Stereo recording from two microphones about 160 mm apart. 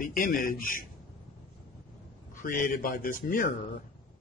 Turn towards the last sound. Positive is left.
turn(degrees=55)  # may be behind; listen again after turning